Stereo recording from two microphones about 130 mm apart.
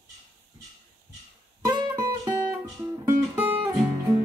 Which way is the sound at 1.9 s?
20° right (ahead or behind).